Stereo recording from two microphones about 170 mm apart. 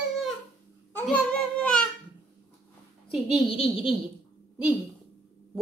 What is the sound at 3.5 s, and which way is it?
Speech, 35° left (ahead or behind).